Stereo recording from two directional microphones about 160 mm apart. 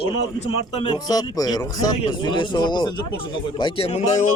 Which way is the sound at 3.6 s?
35° left (ahead or behind).